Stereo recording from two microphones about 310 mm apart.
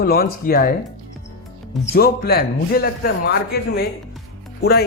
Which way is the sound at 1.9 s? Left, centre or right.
Left.